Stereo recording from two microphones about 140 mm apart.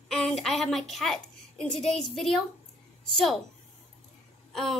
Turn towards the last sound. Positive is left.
turn(degrees=0)  # may be behind; listen again after turning